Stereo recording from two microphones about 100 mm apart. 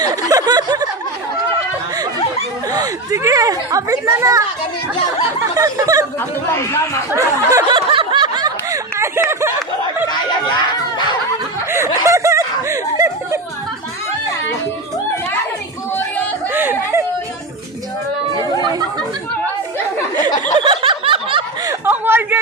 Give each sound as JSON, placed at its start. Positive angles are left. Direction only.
{"t": 0.0, "sound": "speech", "side_deg": -40}
{"t": 2.7, "sound": "a woman's voice", "side_deg": -35}
{"t": 5.5, "sound": "a woman's voice", "side_deg": -35}
{"t": 6.1, "sound": "speech", "side_deg": 25}
{"t": 7.1, "sound": "a woman's voice", "side_deg": -30}
{"t": 7.7, "sound": "snicker", "side_deg": -55}
{"t": 9.0, "sound": "a sound", "side_deg": -25}
{"t": 12.0, "sound": "snicker", "side_deg": -30}
{"t": 16.5, "sound": "chatter", "side_deg": -20}
{"t": 18.6, "sound": "chatter", "side_deg": -45}
{"t": 20.6, "sound": "snicker", "side_deg": -55}
{"t": 21.8, "sound": "a sound", "side_deg": -20}